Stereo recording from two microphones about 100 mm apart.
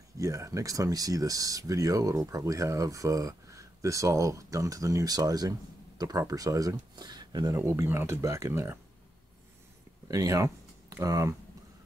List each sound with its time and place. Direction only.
0.2 s speech: 35° right (ahead or behind)
7.5 s speech: 25° right (ahead or behind)
10.0 s speech: 35° right (ahead or behind)